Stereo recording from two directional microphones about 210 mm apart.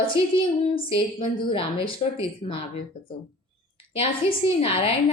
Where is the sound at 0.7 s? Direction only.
25° left (ahead or behind).